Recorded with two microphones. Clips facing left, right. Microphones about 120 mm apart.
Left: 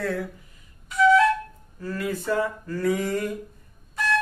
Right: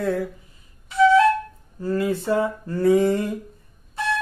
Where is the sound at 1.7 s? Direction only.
30° right (ahead or behind).